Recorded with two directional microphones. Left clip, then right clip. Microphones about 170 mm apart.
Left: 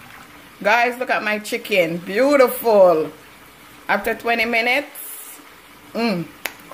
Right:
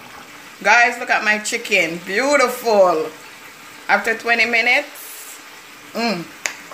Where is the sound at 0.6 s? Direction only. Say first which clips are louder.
Right 3 dB; 55° left (ahead or behind).